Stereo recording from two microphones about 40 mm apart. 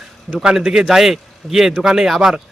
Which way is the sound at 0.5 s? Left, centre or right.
Centre.